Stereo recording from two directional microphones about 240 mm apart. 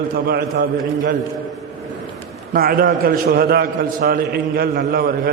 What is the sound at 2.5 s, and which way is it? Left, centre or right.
A man's voice, right.